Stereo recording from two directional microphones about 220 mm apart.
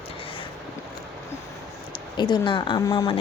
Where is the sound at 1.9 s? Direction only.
20° left (ahead or behind).